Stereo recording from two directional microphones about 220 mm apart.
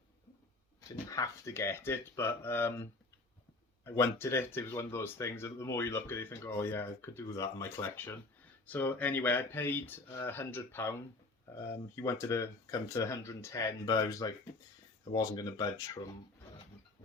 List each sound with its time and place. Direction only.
0.9 s speech: 15° left (ahead or behind)
11.9 s speech: 10° left (ahead or behind)